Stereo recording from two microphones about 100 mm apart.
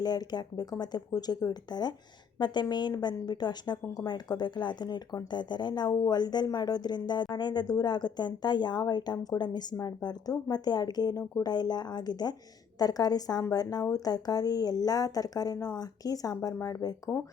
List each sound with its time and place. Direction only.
0.0 s a woman's voice: 45° left (ahead or behind)